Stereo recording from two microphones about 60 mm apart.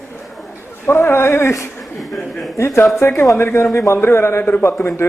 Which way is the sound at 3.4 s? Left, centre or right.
Left.